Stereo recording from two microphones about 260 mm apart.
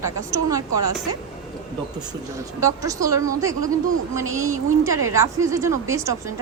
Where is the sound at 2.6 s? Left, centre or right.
Centre.